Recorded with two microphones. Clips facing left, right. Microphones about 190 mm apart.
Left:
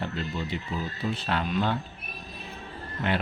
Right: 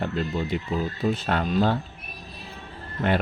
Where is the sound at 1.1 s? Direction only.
45° right (ahead or behind).